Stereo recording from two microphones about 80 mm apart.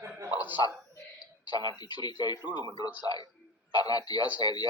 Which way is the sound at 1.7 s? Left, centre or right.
Left.